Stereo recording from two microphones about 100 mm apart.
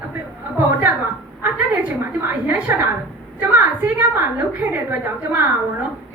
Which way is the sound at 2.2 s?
20° right (ahead or behind).